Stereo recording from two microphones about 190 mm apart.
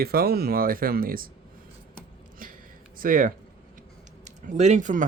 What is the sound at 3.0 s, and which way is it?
Speech, 45° right (ahead or behind).